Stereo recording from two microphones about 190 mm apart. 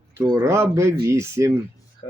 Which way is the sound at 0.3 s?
15° right (ahead or behind).